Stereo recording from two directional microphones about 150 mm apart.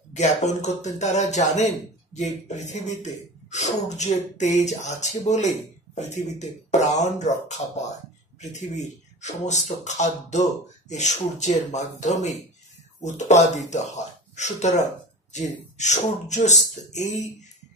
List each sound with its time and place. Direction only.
0.1 s speech: 50° left (ahead or behind)